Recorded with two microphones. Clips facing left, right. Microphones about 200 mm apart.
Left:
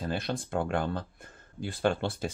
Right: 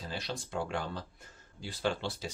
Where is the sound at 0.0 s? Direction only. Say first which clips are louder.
Left 7 dB; 55° left (ahead or behind).